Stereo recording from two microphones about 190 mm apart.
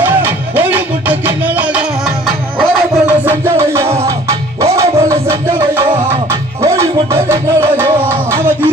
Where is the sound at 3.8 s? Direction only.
30° right (ahead or behind).